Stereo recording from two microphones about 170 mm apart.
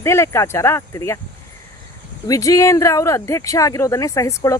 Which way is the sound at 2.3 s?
20° left (ahead or behind).